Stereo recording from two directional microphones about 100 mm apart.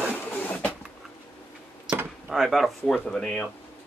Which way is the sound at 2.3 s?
Centre (ahead or behind).